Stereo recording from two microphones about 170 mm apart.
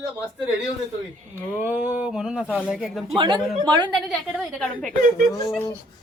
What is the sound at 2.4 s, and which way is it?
Speech, 10° left (ahead or behind).